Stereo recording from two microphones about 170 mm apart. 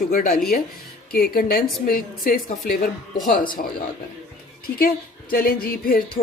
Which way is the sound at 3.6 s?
60° left (ahead or behind).